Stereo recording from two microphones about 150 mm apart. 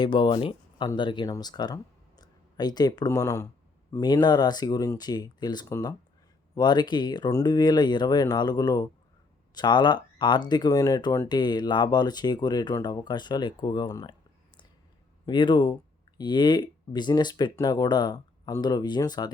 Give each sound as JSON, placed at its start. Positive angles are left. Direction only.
{"t": 0.0, "sound": "speech", "side_deg": 30}
{"t": 15.3, "sound": "speech", "side_deg": 30}